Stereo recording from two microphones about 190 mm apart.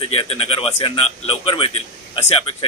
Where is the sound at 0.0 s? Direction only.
30° left (ahead or behind).